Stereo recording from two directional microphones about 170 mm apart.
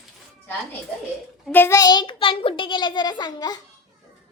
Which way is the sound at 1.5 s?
15° left (ahead or behind).